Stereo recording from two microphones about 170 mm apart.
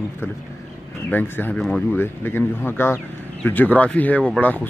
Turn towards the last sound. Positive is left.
turn(degrees=10)  # may be behind; listen again after turning